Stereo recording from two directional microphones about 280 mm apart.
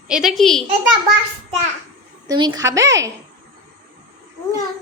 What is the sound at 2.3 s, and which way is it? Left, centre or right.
Speech, centre.